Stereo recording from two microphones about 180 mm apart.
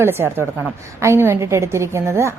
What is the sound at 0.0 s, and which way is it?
A woman's voice, 15° right (ahead or behind).